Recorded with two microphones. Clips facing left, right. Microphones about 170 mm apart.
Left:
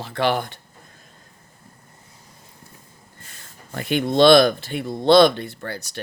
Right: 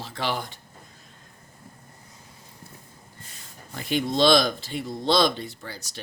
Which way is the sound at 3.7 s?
60° left (ahead or behind).